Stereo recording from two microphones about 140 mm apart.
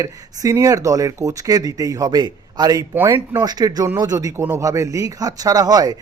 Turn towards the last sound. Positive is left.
turn(degrees=-30)  # may be behind; listen again after turning